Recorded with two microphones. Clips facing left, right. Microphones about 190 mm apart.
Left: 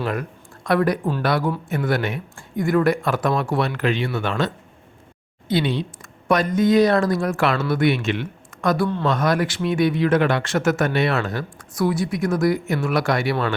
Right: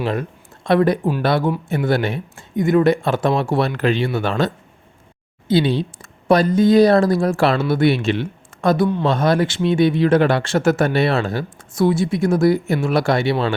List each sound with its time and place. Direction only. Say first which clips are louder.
0.0 s speech: right 3 dB; 25° right (ahead or behind)